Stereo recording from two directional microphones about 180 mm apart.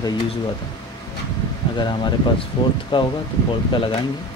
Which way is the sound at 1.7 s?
25° left (ahead or behind).